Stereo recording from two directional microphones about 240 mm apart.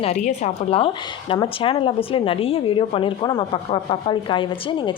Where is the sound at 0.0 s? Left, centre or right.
Left.